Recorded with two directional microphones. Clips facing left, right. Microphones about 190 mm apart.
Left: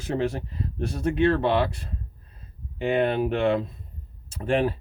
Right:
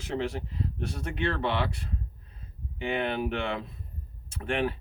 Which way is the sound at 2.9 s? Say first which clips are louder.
Left 7 dB; 45° left (ahead or behind).